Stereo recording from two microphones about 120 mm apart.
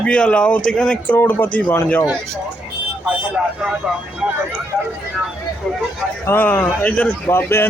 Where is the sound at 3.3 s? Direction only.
5° right (ahead or behind).